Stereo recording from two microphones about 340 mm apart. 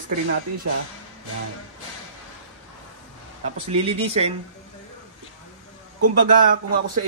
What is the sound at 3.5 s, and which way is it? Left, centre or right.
Speech, centre.